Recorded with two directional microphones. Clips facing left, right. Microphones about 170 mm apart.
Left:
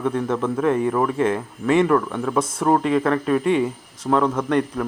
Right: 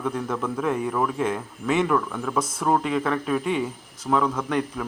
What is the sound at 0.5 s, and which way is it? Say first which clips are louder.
Speech: left 5 dB; centre (ahead or behind).